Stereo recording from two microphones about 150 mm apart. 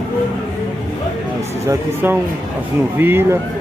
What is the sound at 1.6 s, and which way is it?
Speech, 15° right (ahead or behind).